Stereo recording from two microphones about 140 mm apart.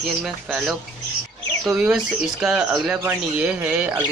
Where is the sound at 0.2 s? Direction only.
Centre (ahead or behind).